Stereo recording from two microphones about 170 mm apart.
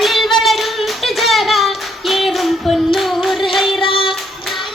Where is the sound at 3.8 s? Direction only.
30° left (ahead or behind).